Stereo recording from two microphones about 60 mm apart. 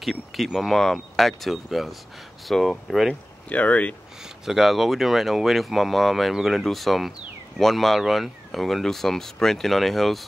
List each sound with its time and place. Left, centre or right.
0.0 s speech: centre
3.4 s speech: left
4.5 s speech: centre